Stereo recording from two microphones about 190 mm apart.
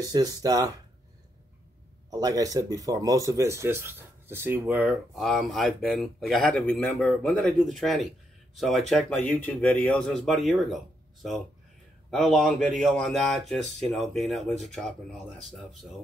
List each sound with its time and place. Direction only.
0.0 s speech: 20° right (ahead or behind)
2.0 s speech: 20° right (ahead or behind); by 15.9 s centre (ahead or behind)